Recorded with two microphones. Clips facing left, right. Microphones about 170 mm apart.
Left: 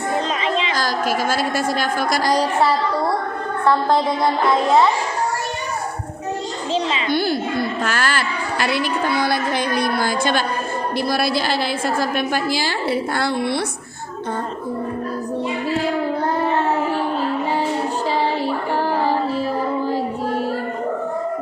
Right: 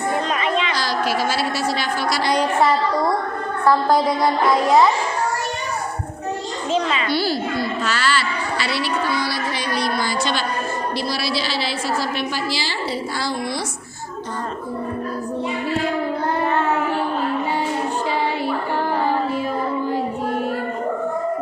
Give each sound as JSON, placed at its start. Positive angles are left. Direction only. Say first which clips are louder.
{"t": 0.4, "sound": "a sound", "louder": "even", "side_deg": 30}
{"t": 0.7, "sound": "a woman's voice", "louder": "left 1 dB", "side_deg": 45}
{"t": 7.1, "sound": "a woman's voice", "louder": "left 4 dB", "side_deg": 50}
{"t": 19.0, "sound": "music", "louder": "left 1 dB", "side_deg": 35}